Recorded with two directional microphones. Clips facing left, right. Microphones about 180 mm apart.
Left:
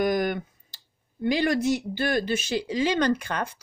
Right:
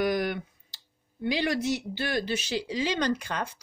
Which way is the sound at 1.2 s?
50° left (ahead or behind).